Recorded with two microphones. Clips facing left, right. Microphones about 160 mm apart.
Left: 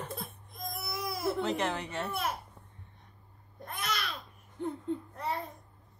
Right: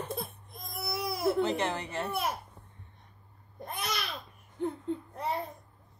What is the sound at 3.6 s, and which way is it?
Babbling, 15° right (ahead or behind).